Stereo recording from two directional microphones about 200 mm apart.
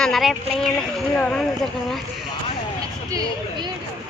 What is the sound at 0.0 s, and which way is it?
Speech, centre (ahead or behind).